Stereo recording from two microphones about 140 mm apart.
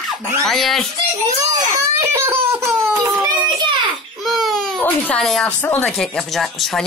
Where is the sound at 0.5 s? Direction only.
Centre (ahead or behind).